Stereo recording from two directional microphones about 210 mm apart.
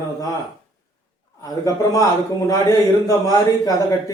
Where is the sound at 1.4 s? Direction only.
15° left (ahead or behind).